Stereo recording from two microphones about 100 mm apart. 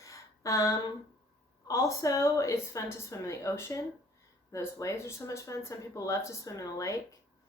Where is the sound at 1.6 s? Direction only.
35° left (ahead or behind).